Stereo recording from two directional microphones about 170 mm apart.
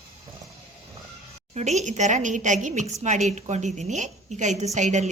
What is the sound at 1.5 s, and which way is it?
A woman's voice, 45° right (ahead or behind).